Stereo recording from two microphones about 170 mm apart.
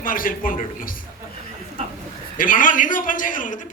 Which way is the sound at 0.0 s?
55° left (ahead or behind).